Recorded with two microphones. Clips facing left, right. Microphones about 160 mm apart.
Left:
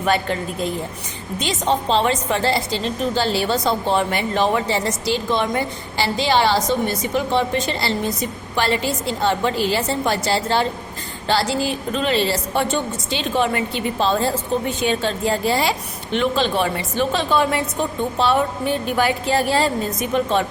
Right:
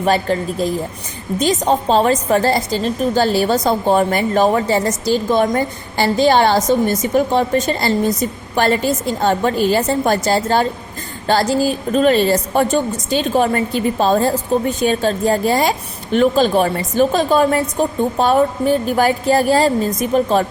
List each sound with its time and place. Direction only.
0.0 s a woman's voice: 35° right (ahead or behind)